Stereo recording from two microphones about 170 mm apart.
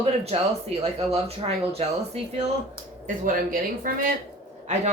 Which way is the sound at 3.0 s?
50° right (ahead or behind).